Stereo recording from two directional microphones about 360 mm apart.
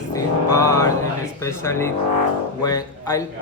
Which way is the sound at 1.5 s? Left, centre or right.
Centre.